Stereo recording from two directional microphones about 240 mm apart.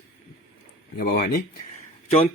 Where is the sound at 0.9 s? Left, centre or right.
Left.